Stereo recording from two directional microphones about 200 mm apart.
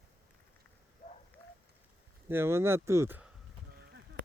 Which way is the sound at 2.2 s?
10° right (ahead or behind).